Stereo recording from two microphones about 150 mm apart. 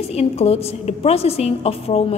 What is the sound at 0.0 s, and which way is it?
A woman's voice, 45° left (ahead or behind).